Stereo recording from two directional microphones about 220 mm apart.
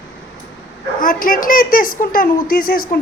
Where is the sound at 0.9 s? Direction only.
40° left (ahead or behind).